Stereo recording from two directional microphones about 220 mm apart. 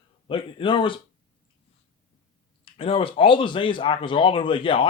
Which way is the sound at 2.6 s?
25° left (ahead or behind).